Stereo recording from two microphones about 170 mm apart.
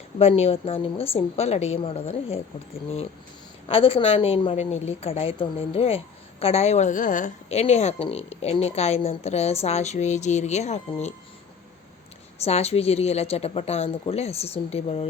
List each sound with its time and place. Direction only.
0.2 s a woman's voice: 35° left (ahead or behind)
3.7 s a woman's voice: 35° left (ahead or behind)
12.4 s a woman's voice: 40° left (ahead or behind)